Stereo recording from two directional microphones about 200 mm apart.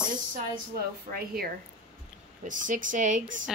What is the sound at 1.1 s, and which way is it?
Speech, 50° right (ahead or behind).